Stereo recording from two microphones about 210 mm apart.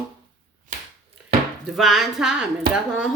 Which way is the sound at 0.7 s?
40° right (ahead or behind).